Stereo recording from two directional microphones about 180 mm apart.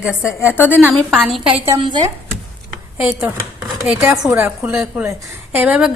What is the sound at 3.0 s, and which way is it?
A woman's voice, 10° right (ahead or behind).